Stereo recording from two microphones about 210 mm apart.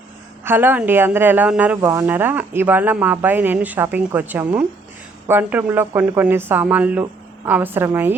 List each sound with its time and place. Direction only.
0.4 s speech: 10° right (ahead or behind)